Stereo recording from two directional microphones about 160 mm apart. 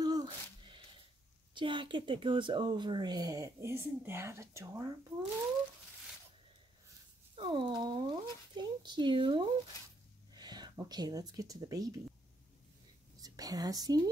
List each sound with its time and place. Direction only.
0.0 s a sound: 25° right (ahead or behind)
1.5 s speech: 30° right (ahead or behind)
7.3 s speech: 30° right (ahead or behind)
13.2 s speech: 25° right (ahead or behind)